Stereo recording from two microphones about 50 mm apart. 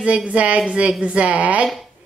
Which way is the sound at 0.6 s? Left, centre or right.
Centre.